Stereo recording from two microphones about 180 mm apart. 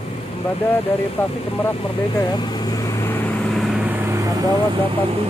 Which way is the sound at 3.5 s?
Centre (ahead or behind).